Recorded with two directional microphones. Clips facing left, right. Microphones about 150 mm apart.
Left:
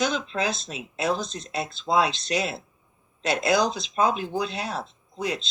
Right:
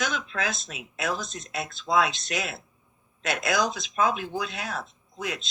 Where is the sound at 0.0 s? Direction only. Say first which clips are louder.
Left 4 dB; 30° left (ahead or behind).